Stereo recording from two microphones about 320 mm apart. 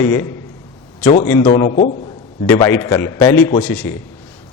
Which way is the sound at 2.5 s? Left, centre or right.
Centre.